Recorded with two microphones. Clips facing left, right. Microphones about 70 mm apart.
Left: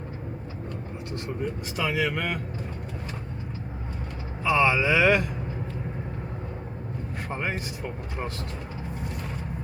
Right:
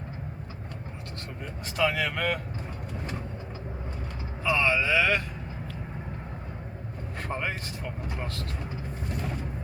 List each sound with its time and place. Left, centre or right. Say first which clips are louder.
1.7 s speech: right 1 dB; centre
4.4 s speech: left 3 dB; centre
7.3 s speech: even; centre